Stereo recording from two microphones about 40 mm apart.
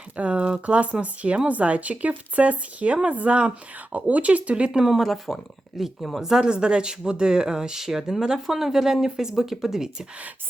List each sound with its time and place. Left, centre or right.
0.2 s speech: right
4.9 s speech: centre
6.3 s speech: right